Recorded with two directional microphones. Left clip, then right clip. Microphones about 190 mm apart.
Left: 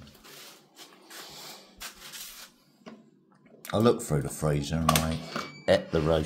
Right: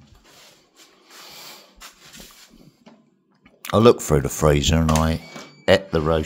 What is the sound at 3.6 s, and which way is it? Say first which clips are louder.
Speech: right 10 dB; 50° right (ahead or behind).